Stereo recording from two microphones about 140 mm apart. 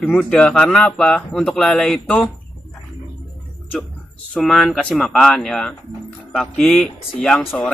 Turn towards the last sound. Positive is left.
turn(degrees=10)  # may be behind; listen again after turning